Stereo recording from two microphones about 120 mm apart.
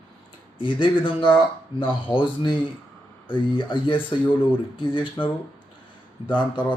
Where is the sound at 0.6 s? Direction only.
45° left (ahead or behind).